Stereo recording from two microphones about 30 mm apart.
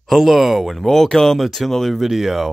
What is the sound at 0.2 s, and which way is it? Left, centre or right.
Speech, centre.